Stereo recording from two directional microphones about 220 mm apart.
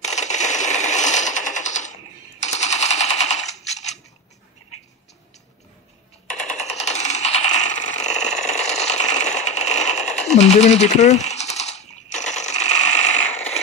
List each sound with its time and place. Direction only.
0.0 s sewing machine: 30° left (ahead or behind)
2.4 s machine gun: 30° left (ahead or behind)
6.5 s a sound: 30° left (ahead or behind)
10.3 s typewriter: 30° left (ahead or behind)